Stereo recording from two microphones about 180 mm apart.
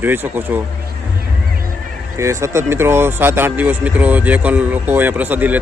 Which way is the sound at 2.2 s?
15° right (ahead or behind).